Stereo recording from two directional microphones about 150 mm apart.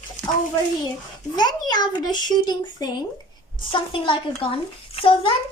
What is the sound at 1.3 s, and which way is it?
A child's voice, 25° left (ahead or behind).